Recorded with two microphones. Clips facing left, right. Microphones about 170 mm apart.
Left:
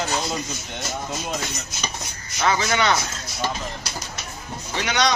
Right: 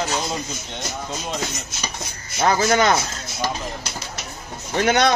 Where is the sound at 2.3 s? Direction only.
45° right (ahead or behind).